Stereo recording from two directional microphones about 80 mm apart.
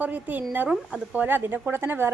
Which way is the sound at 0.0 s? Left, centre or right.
Right.